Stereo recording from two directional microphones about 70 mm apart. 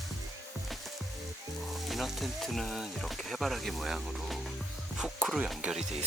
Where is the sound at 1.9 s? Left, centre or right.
Centre.